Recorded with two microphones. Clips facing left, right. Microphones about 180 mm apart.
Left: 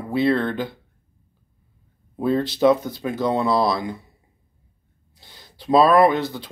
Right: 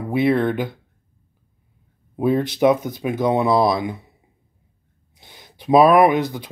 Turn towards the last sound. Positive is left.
turn(degrees=-15)  # may be behind; listen again after turning